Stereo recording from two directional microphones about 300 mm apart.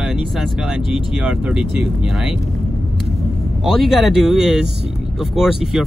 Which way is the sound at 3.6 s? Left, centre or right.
Centre.